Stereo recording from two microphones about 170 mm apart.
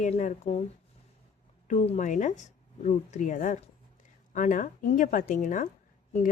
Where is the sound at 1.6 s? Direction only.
45° left (ahead or behind).